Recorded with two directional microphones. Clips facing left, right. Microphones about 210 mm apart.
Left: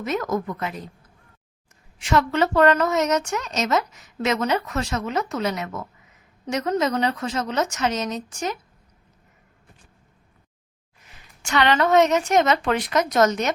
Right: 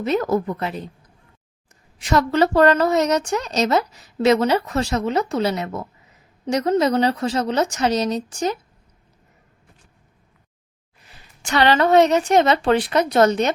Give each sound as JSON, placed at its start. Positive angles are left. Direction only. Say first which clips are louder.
{"t": 0.0, "sound": "a woman's voice", "louder": "right 5 dB", "side_deg": -30}
{"t": 2.0, "sound": "a woman's voice", "louder": "right 3 dB", "side_deg": -40}
{"t": 11.1, "sound": "a woman's voice", "louder": "right 2 dB", "side_deg": -35}